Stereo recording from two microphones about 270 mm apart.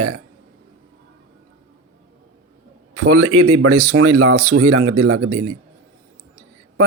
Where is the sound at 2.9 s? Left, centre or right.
Right.